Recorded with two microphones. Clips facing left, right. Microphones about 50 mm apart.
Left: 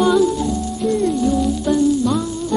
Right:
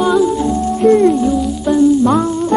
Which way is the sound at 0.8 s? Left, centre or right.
Right.